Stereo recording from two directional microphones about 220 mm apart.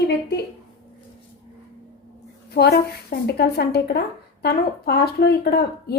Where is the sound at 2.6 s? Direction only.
45° left (ahead or behind).